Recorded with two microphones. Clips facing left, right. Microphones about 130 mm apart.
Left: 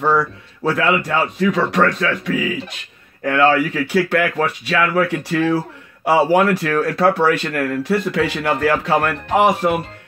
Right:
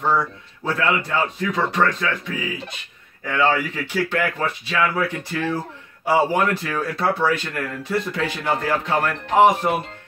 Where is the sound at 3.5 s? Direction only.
70° left (ahead or behind).